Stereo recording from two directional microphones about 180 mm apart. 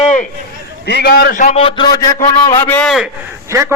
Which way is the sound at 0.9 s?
60° left (ahead or behind).